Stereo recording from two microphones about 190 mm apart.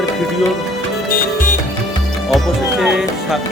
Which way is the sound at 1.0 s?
45° left (ahead or behind).